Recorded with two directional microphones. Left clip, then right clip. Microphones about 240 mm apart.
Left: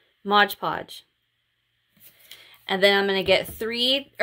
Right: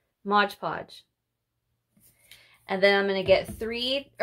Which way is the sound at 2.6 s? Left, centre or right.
Left.